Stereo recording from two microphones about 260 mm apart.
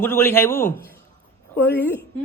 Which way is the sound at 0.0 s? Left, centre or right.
Centre.